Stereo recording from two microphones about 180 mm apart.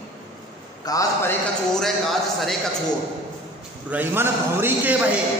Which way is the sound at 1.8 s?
Centre (ahead or behind).